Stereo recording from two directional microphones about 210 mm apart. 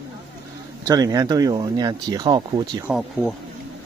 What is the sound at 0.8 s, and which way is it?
Speech, 15° right (ahead or behind).